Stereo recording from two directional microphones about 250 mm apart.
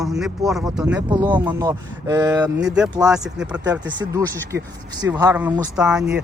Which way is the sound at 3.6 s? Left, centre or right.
Centre.